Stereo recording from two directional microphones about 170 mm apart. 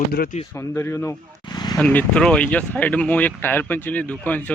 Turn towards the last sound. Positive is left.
turn(degrees=10)  # may be behind; listen again after turning